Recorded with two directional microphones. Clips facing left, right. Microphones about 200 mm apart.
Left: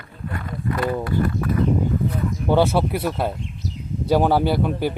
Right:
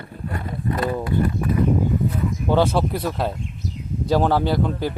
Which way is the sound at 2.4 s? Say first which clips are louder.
Left 1 dB; 10° left (ahead or behind).